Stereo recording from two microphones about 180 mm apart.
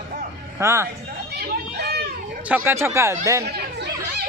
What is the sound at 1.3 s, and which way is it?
Children playing, 60° right (ahead or behind).